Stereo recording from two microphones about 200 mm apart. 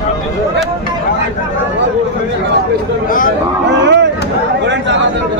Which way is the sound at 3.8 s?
60° right (ahead or behind).